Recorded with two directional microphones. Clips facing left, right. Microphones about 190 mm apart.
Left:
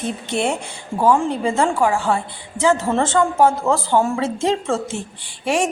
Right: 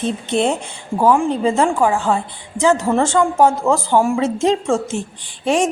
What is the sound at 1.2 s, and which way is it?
A woman's voice, 20° right (ahead or behind).